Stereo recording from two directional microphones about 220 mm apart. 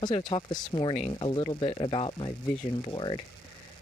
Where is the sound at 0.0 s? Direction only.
20° left (ahead or behind).